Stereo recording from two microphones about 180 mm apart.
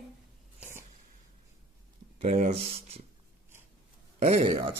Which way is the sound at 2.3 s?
35° right (ahead or behind).